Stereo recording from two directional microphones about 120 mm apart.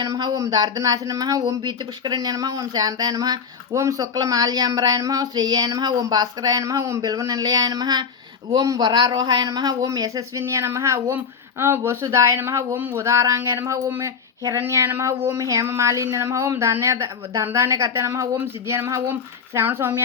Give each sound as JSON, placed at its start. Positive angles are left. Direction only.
{"t": 0.0, "sound": "speech", "side_deg": -30}